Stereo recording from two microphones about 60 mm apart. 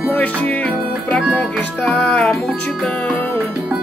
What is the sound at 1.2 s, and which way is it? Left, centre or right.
Speech, centre.